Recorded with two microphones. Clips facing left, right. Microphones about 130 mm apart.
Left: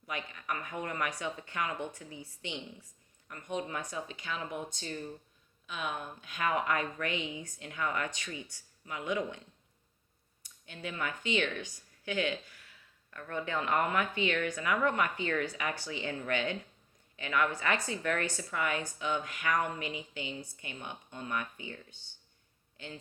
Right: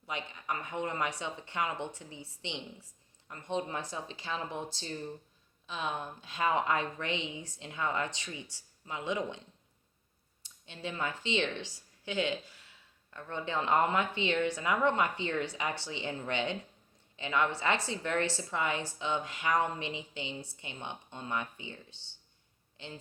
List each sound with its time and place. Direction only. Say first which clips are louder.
0.0 s speech: right 1 dB; 25° right (ahead or behind)
10.4 s speech: right 1 dB; 25° right (ahead or behind)